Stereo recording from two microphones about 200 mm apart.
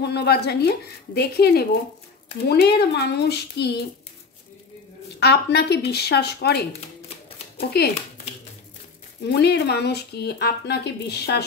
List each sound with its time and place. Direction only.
0.0 s a woman's voice: 55° left (ahead or behind)
5.2 s a woman's voice: 55° left (ahead or behind)
9.2 s speech: 55° left (ahead or behind)